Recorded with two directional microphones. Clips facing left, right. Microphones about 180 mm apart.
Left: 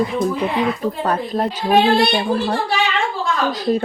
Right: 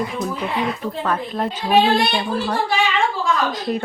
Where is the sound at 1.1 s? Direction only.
35° left (ahead or behind).